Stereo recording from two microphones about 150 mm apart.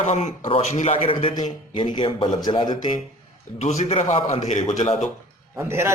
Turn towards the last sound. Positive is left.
turn(degrees=-15)  # may be behind; listen again after turning